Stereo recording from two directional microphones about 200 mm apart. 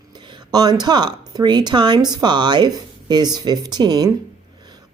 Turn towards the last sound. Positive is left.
turn(degrees=-20)  # may be behind; listen again after turning